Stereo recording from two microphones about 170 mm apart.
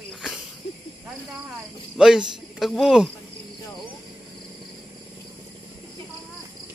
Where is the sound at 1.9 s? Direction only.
5° right (ahead or behind).